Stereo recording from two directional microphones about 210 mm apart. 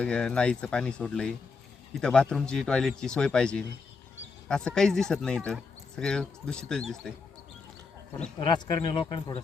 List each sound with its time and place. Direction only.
0.0 s speech: 5° left (ahead or behind)
8.4 s speech: 20° left (ahead or behind)